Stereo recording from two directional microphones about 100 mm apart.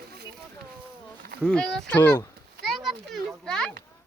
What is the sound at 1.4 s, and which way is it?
Speech, 5° left (ahead or behind).